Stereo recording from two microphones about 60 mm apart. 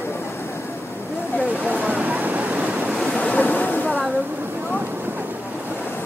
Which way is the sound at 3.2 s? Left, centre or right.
Left.